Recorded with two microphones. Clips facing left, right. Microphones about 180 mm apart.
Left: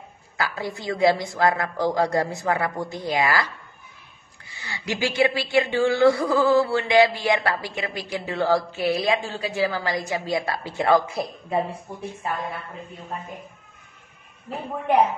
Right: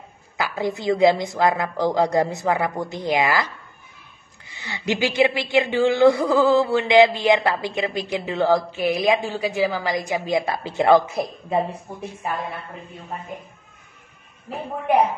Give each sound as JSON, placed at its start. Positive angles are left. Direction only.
{"t": 0.4, "sound": "speech", "side_deg": -20}
{"t": 4.5, "sound": "speech", "side_deg": -20}